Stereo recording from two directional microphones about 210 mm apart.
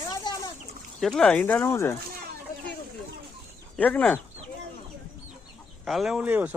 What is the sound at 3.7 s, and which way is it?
Speech, 5° left (ahead or behind).